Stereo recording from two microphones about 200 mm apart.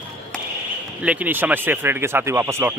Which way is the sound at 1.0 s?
5° right (ahead or behind).